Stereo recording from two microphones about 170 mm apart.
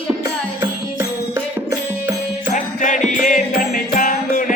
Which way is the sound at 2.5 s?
50° left (ahead or behind).